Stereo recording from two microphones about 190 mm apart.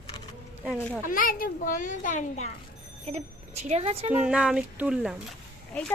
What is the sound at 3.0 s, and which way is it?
Speech, 35° right (ahead or behind).